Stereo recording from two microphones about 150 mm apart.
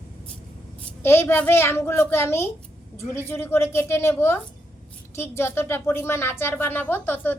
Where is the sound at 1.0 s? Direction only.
15° left (ahead or behind).